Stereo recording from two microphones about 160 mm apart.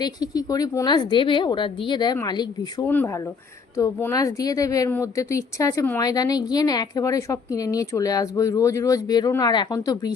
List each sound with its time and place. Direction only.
0.0 s speech: 25° left (ahead or behind)
2.8 s speech: 10° left (ahead or behind)